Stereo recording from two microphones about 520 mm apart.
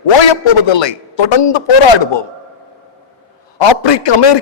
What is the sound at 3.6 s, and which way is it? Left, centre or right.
Speech, left.